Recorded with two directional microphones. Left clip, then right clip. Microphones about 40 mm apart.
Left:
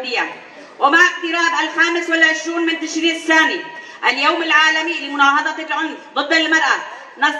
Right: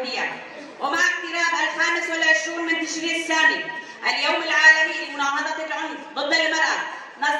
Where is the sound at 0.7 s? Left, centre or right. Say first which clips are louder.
Left 9 dB; left.